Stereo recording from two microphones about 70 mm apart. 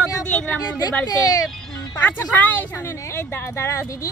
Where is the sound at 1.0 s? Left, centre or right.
Left.